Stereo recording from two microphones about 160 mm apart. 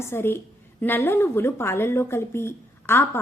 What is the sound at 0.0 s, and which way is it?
A woman's voice, 15° left (ahead or behind).